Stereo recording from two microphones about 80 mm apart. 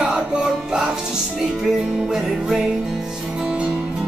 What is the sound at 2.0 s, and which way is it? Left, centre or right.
Music, centre.